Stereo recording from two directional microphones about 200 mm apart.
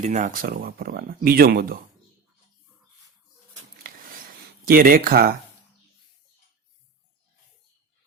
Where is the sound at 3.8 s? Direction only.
45° right (ahead or behind).